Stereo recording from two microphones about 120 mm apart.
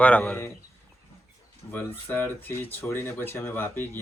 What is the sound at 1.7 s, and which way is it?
Speech, 15° left (ahead or behind).